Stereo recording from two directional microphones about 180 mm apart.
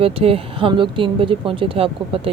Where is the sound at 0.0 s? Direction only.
30° right (ahead or behind).